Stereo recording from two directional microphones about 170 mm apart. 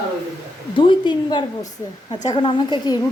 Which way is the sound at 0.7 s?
30° left (ahead or behind).